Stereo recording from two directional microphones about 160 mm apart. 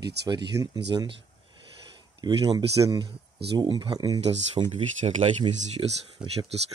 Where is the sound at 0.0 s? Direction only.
90° right.